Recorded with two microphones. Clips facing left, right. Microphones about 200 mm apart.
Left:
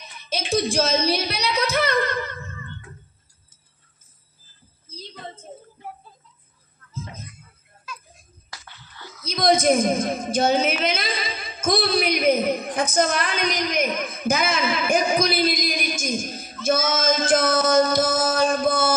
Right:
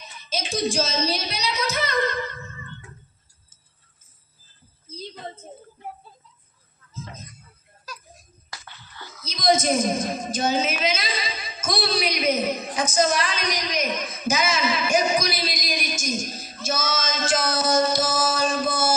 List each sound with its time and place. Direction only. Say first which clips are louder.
0.3 s a woman's voice: left 3 dB; 60° left (ahead or behind)
9.2 s a woman's voice: left 2 dB; 55° left (ahead or behind)